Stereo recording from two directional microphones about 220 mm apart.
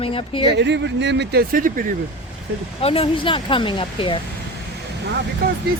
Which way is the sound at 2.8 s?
25° left (ahead or behind).